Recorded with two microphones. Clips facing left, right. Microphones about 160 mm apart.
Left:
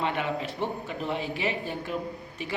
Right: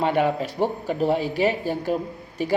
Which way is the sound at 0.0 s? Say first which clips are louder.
Right 8 dB; 40° right (ahead or behind).